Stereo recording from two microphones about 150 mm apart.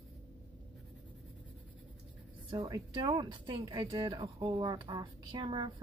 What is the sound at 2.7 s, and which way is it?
Speech, 25° right (ahead or behind).